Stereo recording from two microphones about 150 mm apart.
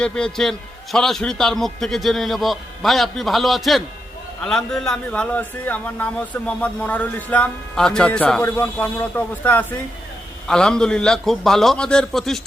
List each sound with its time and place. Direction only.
0.0 s a man's voice: 5° left (ahead or behind)